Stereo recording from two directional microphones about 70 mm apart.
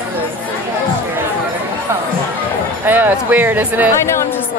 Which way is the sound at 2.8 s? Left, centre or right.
Right.